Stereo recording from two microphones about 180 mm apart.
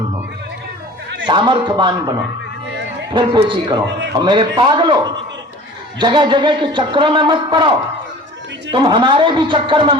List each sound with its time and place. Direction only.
1.3 s a man's voice: 25° right (ahead or behind)